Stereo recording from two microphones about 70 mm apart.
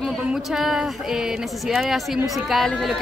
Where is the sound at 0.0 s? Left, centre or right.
Centre.